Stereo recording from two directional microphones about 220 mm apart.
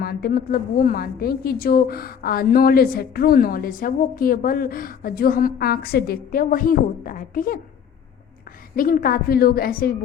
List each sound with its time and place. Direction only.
0.0 s a woman's voice: 45° left (ahead or behind)
8.7 s a woman's voice: 40° left (ahead or behind)